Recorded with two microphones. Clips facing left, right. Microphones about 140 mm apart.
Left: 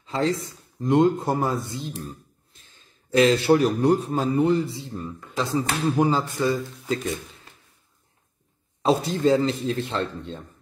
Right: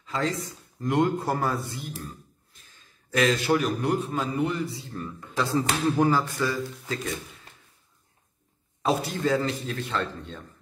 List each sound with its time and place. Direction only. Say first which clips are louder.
0.0 s a sound: left 4 dB; 25° left (ahead or behind)
0.7 s a man's voice: left 5 dB; 25° left (ahead or behind)
8.8 s a man's voice: left 5 dB; 25° left (ahead or behind)